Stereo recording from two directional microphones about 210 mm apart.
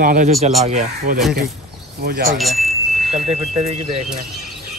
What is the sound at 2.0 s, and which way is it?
Speech, 50° right (ahead or behind).